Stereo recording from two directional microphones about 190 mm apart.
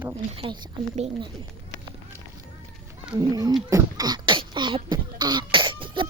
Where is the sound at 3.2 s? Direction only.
20° right (ahead or behind).